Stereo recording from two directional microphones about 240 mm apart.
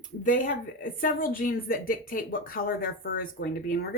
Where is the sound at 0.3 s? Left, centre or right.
Left.